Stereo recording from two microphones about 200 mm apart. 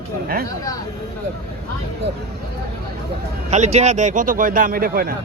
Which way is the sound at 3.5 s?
35° right (ahead or behind).